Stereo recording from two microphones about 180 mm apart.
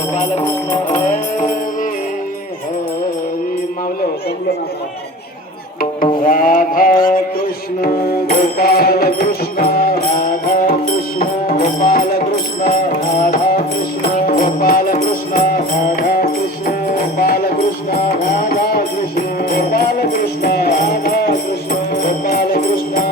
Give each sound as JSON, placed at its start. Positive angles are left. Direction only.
{"t": 0.3, "sound": "music", "side_deg": 40}
{"t": 6.2, "sound": "mantra", "side_deg": 50}
{"t": 7.8, "sound": "music", "side_deg": 55}